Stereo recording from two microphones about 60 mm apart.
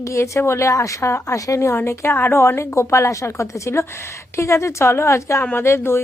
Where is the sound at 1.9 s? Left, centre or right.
Left.